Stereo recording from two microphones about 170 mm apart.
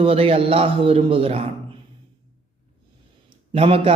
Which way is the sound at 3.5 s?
35° right (ahead or behind).